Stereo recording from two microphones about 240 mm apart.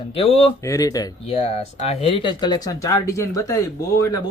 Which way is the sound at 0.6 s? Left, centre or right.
Centre.